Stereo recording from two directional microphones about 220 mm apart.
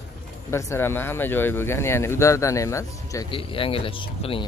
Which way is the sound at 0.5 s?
10° left (ahead or behind).